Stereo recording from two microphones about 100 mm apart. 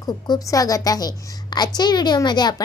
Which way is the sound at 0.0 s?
35° left (ahead or behind).